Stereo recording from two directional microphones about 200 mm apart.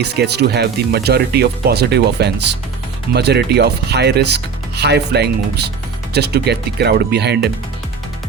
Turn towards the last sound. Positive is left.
turn(degrees=-55)  # may be behind; listen again after turning